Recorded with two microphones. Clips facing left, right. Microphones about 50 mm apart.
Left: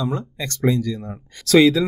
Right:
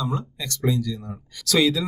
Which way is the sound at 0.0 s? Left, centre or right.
Left.